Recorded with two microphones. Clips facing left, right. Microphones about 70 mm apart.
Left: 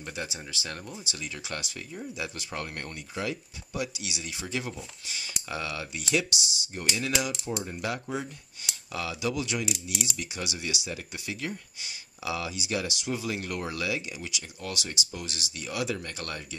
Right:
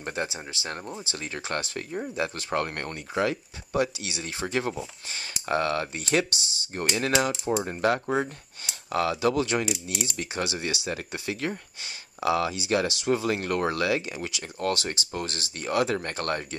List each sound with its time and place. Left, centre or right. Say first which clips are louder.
0.0 s speech: right 5 dB; right